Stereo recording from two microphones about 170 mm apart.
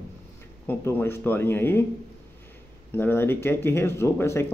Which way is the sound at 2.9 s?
10° left (ahead or behind).